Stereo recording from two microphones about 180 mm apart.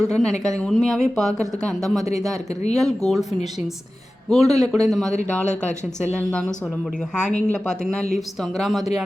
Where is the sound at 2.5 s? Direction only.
40° left (ahead or behind).